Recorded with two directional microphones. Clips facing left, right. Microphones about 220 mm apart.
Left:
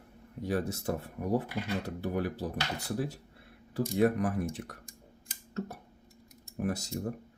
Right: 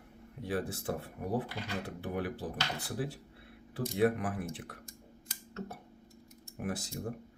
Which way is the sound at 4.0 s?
40° left (ahead or behind).